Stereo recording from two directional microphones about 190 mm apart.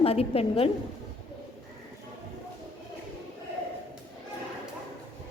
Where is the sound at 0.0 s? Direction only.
30° left (ahead or behind).